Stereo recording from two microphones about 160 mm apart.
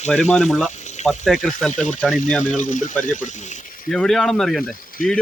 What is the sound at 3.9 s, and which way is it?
Speech, 5° left (ahead or behind).